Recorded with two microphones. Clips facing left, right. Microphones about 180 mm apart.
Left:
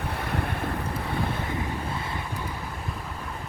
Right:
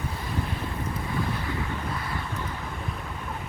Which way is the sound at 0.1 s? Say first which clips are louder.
Left 2 dB; 65° left (ahead or behind).